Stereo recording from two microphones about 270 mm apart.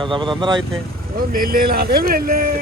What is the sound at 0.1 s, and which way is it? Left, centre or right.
Speech, centre.